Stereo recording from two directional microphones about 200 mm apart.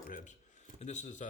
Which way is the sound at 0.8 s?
35° left (ahead or behind).